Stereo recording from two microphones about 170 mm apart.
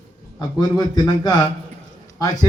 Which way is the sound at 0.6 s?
25° left (ahead or behind).